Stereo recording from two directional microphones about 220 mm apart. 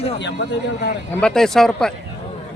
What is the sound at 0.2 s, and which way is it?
Speech, 50° left (ahead or behind).